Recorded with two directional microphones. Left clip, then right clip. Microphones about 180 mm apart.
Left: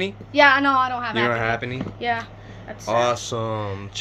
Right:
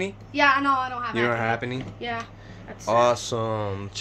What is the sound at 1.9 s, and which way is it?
Speech, 55° left (ahead or behind).